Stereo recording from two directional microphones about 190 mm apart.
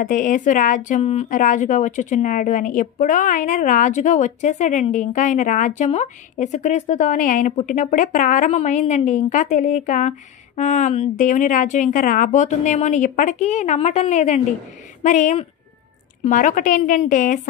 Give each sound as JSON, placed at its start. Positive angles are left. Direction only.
{"t": 0.0, "sound": "a woman's voice", "side_deg": 45}